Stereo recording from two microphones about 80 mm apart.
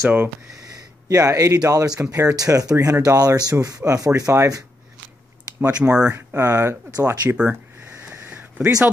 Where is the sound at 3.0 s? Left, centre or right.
Right.